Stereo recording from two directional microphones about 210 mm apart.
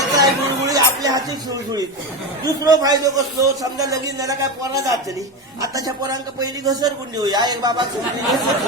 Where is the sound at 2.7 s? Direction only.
20° right (ahead or behind).